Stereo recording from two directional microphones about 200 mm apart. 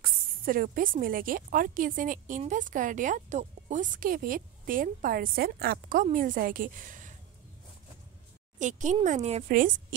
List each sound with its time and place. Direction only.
0.0 s a woman's voice: 45° right (ahead or behind)
8.5 s a woman's voice: 40° right (ahead or behind)